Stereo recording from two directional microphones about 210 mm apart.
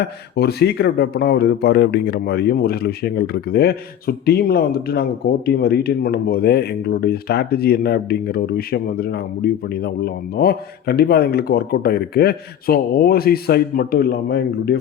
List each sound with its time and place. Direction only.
0.0 s speech: 50° left (ahead or behind)